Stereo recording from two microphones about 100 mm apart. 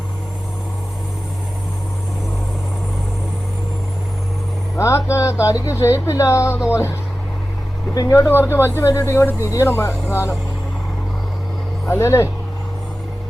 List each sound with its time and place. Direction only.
4.8 s speech: 30° left (ahead or behind)
7.9 s speech: 35° left (ahead or behind)
8.3 s speech: 25° left (ahead or behind)
11.9 s speech: 25° left (ahead or behind)